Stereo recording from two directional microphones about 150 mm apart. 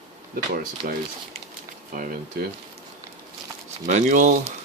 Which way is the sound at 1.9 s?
70° right (ahead or behind).